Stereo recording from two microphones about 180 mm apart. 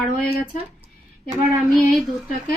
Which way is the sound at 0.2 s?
55° left (ahead or behind).